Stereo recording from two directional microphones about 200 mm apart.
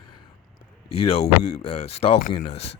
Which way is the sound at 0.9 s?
30° left (ahead or behind).